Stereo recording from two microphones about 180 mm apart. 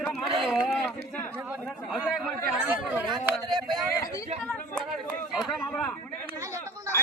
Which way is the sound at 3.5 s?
25° right (ahead or behind).